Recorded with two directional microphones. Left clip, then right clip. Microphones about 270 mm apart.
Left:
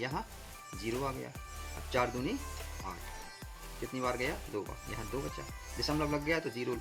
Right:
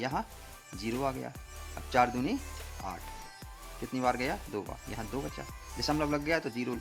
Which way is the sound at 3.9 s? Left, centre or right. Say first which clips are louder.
Right 4 dB; right.